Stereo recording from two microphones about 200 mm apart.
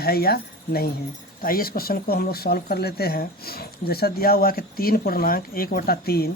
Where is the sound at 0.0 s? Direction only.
50° left (ahead or behind).